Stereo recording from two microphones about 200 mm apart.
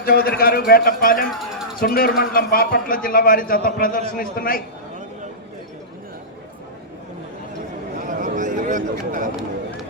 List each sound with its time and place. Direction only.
0.0 s a man's voice: 50° left (ahead or behind)
1.3 s music: centre (ahead or behind)
1.8 s a man's voice: 45° left (ahead or behind)
8.0 s a sound: 40° right (ahead or behind)